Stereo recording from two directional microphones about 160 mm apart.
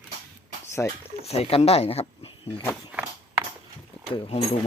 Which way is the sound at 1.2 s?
40° left (ahead or behind).